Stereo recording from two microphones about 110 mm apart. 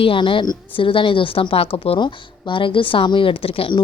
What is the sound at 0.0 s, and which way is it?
A woman's voice, 50° left (ahead or behind).